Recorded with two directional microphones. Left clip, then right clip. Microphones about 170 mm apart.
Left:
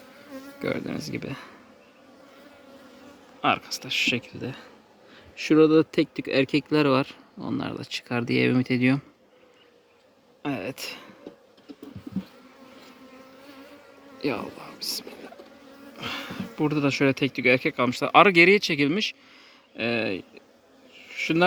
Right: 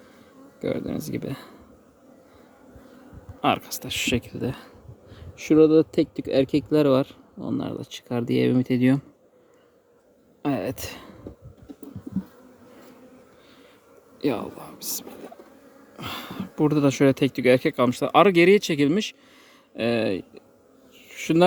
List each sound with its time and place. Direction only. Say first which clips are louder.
0.6 s speech: right 2 dB; 15° right (ahead or behind)
0.9 s speech: right 2 dB; 30° right (ahead or behind)
3.4 s speech: right 1 dB; 35° right (ahead or behind)
5.1 s a sound: right 1 dB; 30° right (ahead or behind)
5.5 s speech: right 2 dB; 15° right (ahead or behind)
10.4 s speech: right 4 dB; 45° right (ahead or behind)
14.2 s speech: right 3 dB; 40° right (ahead or behind)
21.0 s a sound: right 2 dB; 45° right (ahead or behind)